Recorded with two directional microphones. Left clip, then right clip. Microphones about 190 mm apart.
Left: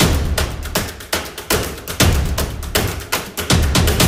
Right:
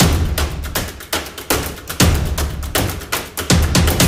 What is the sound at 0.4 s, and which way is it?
Music, centre (ahead or behind).